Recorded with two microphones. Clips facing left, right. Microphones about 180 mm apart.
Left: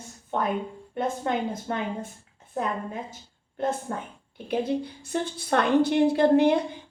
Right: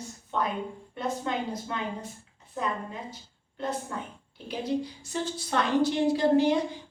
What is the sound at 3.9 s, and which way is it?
A woman's voice, 45° left (ahead or behind).